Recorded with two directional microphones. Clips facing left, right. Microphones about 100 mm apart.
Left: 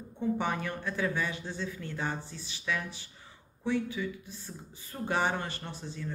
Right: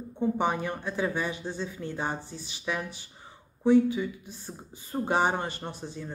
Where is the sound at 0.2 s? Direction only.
25° right (ahead or behind).